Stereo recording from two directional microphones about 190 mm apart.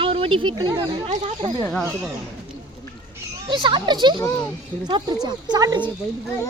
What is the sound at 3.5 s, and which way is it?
Speech, 25° right (ahead or behind).